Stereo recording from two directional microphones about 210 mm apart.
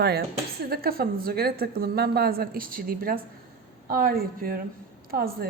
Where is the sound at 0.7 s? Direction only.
45° right (ahead or behind).